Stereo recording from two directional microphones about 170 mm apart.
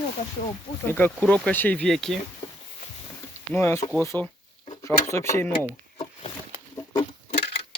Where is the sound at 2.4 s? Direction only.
25° left (ahead or behind).